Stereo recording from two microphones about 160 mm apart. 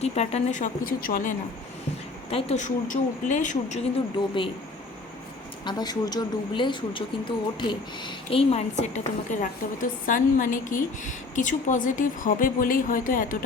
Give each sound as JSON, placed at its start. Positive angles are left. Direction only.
{"t": 0.0, "sound": "speech", "side_deg": 45}
{"t": 2.3, "sound": "speech", "side_deg": 45}
{"t": 5.6, "sound": "speech", "side_deg": 25}